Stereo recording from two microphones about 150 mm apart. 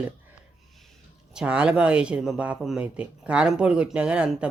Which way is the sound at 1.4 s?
10° right (ahead or behind).